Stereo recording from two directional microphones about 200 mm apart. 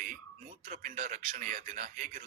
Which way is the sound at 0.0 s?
40° right (ahead or behind).